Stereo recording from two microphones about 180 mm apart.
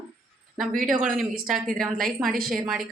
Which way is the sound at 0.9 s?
50° right (ahead or behind).